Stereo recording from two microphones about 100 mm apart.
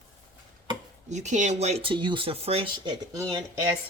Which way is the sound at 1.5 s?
90° right.